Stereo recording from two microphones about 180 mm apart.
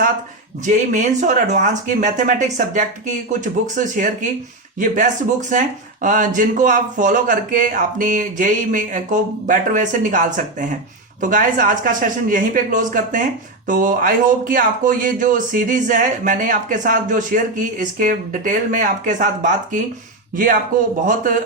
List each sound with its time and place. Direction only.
0.6 s speech: 45° right (ahead or behind)